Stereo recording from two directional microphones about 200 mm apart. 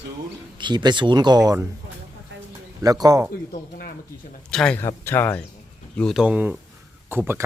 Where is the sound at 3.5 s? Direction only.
50° left (ahead or behind).